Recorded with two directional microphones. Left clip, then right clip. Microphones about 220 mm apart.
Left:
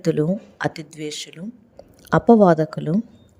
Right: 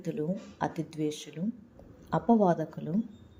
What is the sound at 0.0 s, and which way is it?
A woman's voice, 45° left (ahead or behind).